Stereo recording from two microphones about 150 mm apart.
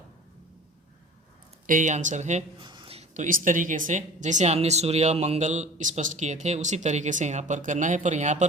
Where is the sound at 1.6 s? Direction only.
60° right (ahead or behind).